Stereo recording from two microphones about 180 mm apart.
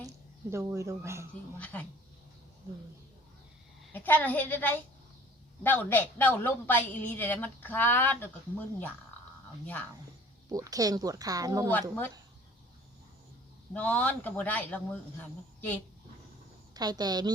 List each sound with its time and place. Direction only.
0.5 s speech: 15° right (ahead or behind)
1.5 s a woman's voice: 10° left (ahead or behind)
3.9 s a woman's voice: 10° left (ahead or behind)
10.5 s speech: 20° right (ahead or behind)
11.7 s a woman's voice: 10° left (ahead or behind)
13.7 s a woman's voice: 10° left (ahead or behind)
16.7 s speech: 20° right (ahead or behind)